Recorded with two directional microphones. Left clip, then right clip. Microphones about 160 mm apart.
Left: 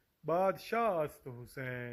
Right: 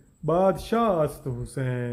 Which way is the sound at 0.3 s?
25° left (ahead or behind).